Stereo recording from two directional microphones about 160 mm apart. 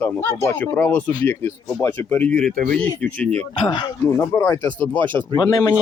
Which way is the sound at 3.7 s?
20° left (ahead or behind).